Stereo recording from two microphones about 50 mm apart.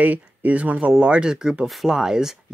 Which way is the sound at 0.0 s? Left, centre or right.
Right.